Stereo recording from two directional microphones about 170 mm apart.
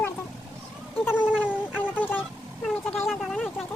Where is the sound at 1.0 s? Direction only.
10° left (ahead or behind).